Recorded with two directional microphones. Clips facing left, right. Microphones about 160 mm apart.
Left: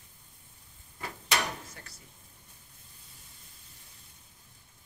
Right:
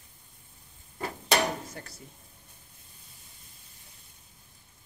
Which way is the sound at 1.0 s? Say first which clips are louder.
Right 6 dB; 40° right (ahead or behind).